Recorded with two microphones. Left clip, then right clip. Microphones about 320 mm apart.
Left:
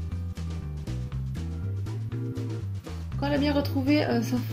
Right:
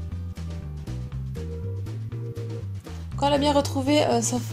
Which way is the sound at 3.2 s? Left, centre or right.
Right.